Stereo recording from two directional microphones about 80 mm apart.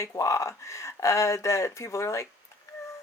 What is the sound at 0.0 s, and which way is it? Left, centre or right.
Speech, left.